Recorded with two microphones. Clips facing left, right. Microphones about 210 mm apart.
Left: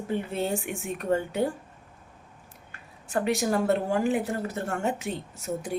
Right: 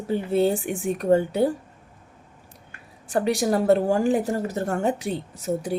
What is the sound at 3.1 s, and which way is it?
A woman's voice, 35° right (ahead or behind).